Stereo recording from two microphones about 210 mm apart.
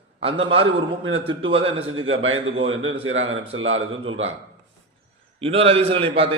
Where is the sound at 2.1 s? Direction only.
70° right (ahead or behind).